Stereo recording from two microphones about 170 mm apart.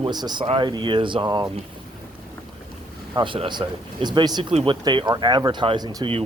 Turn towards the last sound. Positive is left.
turn(degrees=-30)  # may be behind; listen again after turning